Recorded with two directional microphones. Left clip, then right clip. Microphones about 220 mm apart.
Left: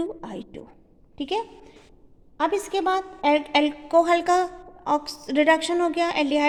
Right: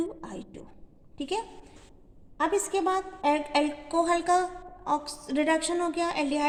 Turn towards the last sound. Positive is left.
turn(degrees=45)  # may be behind; listen again after turning